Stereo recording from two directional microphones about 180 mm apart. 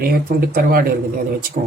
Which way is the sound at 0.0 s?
55° right (ahead or behind).